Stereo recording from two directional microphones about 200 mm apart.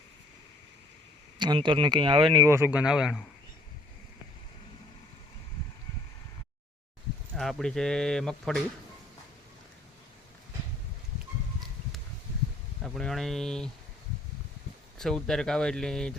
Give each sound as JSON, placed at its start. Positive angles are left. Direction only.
{"t": 1.4, "sound": "speech", "side_deg": -25}
{"t": 7.3, "sound": "speech", "side_deg": 0}
{"t": 12.8, "sound": "speech", "side_deg": 5}
{"t": 14.9, "sound": "speech", "side_deg": 0}